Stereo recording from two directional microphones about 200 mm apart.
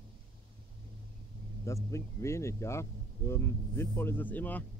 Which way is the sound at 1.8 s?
15° left (ahead or behind).